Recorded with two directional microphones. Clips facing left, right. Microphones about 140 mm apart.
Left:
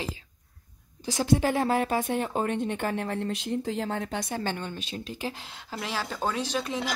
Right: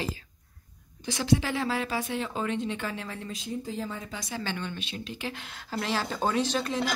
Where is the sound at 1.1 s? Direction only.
45° left (ahead or behind).